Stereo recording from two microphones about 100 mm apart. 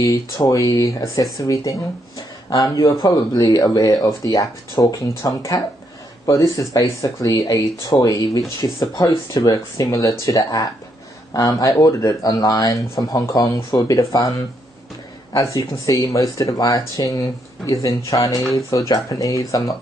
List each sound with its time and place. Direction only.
0.0 s speech: 35° left (ahead or behind)
15.5 s speech: 35° left (ahead or behind)